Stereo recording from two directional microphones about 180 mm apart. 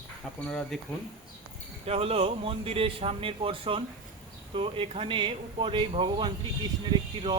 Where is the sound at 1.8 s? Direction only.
35° right (ahead or behind).